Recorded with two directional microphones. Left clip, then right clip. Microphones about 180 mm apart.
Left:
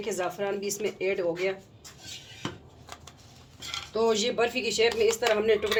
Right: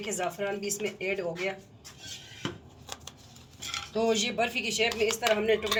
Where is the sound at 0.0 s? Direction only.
55° left (ahead or behind).